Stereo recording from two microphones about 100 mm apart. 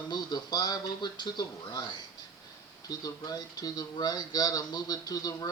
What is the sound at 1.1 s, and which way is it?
Speech, 50° left (ahead or behind).